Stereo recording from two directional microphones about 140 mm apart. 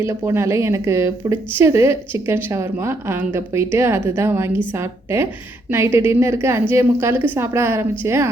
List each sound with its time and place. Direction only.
0.0 s speech: 20° right (ahead or behind)